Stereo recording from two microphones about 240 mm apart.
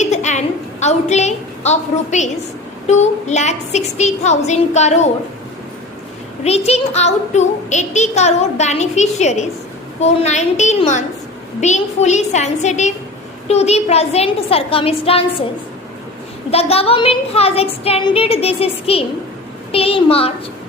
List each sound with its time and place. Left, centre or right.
0.0 s a sound: left
2.8 s speech: left
6.7 s speech: left
16.5 s speech: left